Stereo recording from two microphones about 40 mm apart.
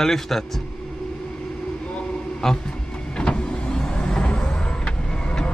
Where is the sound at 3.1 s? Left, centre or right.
Left.